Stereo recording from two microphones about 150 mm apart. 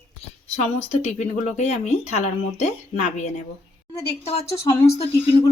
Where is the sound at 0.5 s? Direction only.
45° left (ahead or behind).